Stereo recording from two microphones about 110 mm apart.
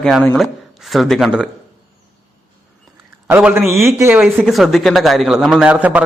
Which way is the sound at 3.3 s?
15° right (ahead or behind).